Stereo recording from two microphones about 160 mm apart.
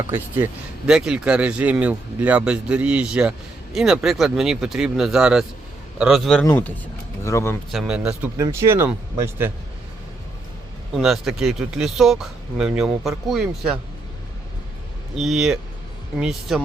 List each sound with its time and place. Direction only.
0.9 s speech: 5° right (ahead or behind)
6.4 s speech: 15° left (ahead or behind)
7.7 s speech: 5° right (ahead or behind)
8.4 s speech: 20° right (ahead or behind)
10.9 s speech: centre (ahead or behind)
15.1 s speech: centre (ahead or behind)